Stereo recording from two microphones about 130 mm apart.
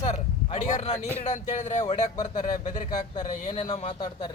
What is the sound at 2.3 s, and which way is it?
Speech, 85° left.